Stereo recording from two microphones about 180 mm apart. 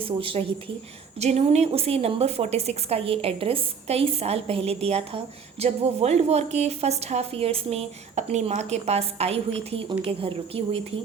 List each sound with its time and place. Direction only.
0.0 s a woman's voice: 30° right (ahead or behind)